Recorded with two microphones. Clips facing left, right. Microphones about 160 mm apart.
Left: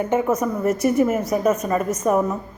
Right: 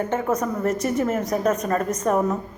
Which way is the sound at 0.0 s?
10° left (ahead or behind).